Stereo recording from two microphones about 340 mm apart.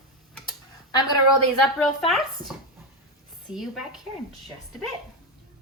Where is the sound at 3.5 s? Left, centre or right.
Centre.